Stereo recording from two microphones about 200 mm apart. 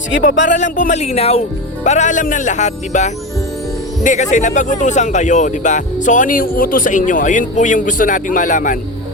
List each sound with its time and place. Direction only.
0.4 s speech: 40° left (ahead or behind)